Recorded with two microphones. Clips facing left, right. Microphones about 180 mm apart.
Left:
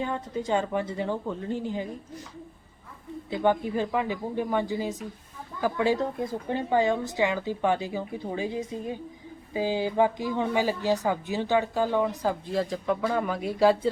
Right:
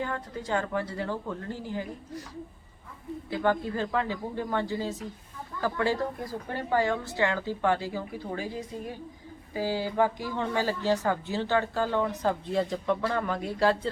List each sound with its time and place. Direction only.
0.0 s a woman's voice: 20° left (ahead or behind)
3.2 s a woman's voice: 20° left (ahead or behind)